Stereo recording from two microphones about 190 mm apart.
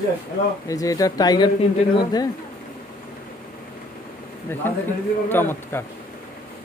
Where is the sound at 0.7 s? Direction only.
20° left (ahead or behind).